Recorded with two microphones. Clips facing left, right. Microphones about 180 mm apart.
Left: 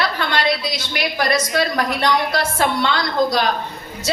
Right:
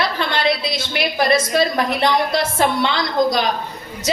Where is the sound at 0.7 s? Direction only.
25° right (ahead or behind).